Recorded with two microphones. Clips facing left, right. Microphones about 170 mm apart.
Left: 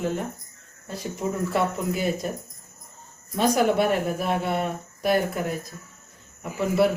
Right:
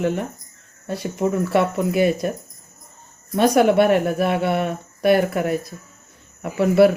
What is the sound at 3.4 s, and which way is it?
Speech, 70° right (ahead or behind).